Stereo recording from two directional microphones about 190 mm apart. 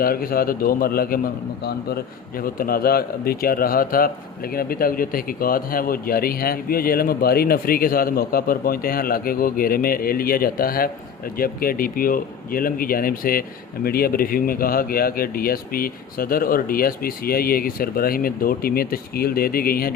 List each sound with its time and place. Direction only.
0.0 s a man's voice: 50° left (ahead or behind)
2.4 s a man's voice: 50° left (ahead or behind)